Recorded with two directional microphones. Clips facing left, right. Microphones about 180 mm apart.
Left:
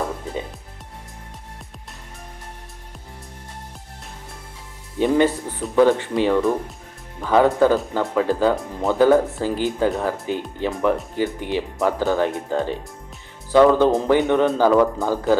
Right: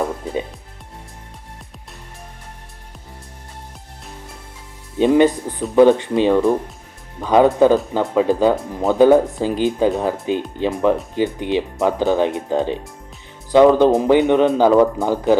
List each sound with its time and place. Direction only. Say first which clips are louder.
4.9 s a man's voice: right 4 dB; 20° right (ahead or behind)